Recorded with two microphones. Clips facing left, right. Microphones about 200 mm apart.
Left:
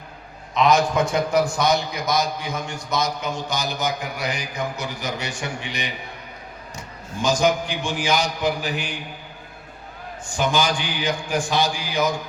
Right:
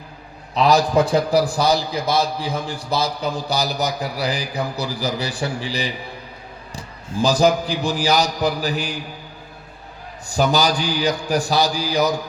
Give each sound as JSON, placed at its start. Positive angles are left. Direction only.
{"t": 0.5, "sound": "a man's voice", "side_deg": -35}
{"t": 10.2, "sound": "a man's voice", "side_deg": -35}